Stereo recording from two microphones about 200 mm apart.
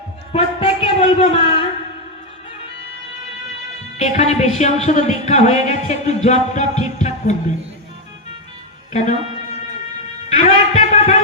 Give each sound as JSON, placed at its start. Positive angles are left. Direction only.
{"t": 0.3, "sound": "speech", "side_deg": 30}
{"t": 3.9, "sound": "speech", "side_deg": 35}
{"t": 8.9, "sound": "speech", "side_deg": 35}
{"t": 10.2, "sound": "a sound", "side_deg": 30}